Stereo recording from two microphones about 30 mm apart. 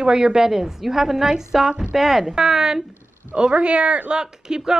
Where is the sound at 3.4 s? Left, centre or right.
Right.